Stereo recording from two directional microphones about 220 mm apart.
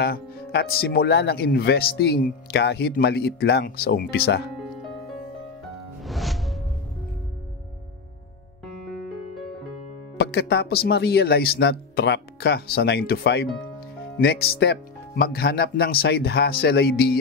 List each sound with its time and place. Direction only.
0.0 s speech: 45° left (ahead or behind)
6.0 s music: centre (ahead or behind)
10.1 s speech: 50° left (ahead or behind)